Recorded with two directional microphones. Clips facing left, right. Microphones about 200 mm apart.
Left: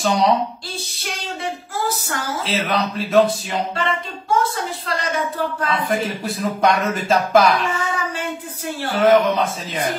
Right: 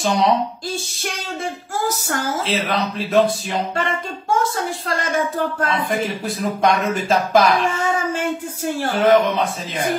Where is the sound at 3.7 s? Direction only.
50° right (ahead or behind).